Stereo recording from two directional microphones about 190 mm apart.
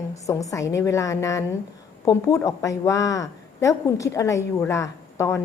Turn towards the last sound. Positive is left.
turn(degrees=15)  # may be behind; listen again after turning